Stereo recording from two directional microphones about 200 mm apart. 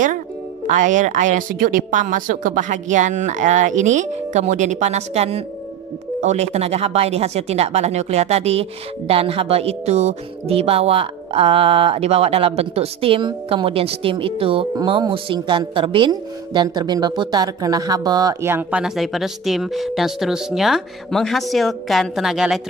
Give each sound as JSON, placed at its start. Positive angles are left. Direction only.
{"t": 0.7, "sound": "a woman's voice", "side_deg": -40}